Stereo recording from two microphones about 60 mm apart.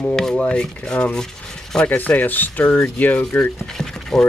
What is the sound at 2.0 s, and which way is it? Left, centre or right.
Speech, left.